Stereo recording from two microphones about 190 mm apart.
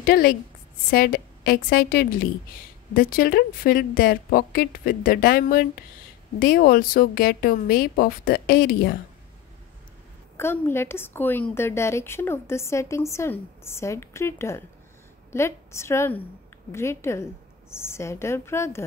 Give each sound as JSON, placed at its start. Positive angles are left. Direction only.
{"t": 0.0, "sound": "speech", "side_deg": 50}
{"t": 10.3, "sound": "a woman's voice", "side_deg": 10}